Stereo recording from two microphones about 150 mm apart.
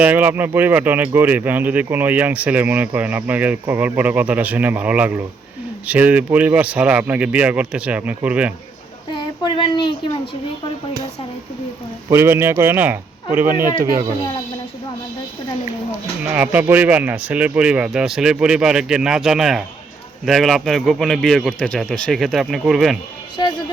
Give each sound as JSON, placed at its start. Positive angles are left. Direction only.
{"t": 0.0, "sound": "speech", "side_deg": -10}
{"t": 9.1, "sound": "speech", "side_deg": 30}
{"t": 12.1, "sound": "speech", "side_deg": -15}
{"t": 13.5, "sound": "speech", "side_deg": -65}
{"t": 16.3, "sound": "speech", "side_deg": -10}
{"t": 23.4, "sound": "speech", "side_deg": 25}